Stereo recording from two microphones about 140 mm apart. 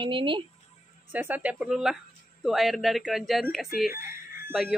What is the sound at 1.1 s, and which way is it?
Speech, 10° right (ahead or behind).